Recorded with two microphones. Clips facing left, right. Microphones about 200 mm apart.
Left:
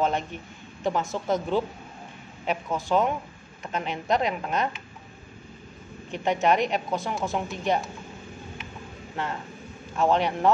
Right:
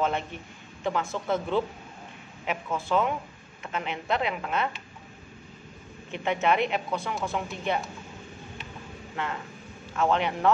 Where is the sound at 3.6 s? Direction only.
40° left (ahead or behind).